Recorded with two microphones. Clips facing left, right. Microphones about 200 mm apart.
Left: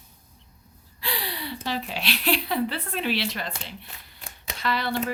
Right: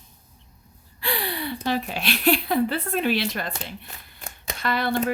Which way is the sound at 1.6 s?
50° right (ahead or behind).